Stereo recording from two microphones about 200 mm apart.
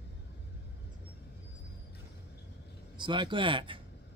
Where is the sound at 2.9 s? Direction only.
25° right (ahead or behind).